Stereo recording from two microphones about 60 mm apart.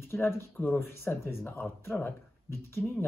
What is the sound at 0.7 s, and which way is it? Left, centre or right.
Speech, left.